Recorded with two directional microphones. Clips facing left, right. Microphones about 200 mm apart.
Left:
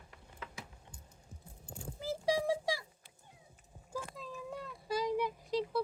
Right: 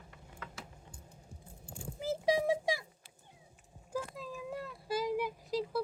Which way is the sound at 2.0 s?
20° right (ahead or behind).